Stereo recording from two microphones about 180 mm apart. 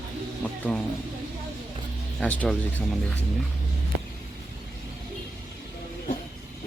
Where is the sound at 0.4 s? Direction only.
10° left (ahead or behind).